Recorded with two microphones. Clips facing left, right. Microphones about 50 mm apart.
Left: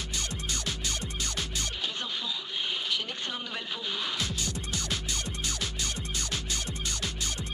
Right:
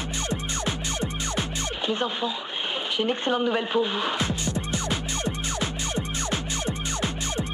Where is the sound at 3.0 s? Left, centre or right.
Right.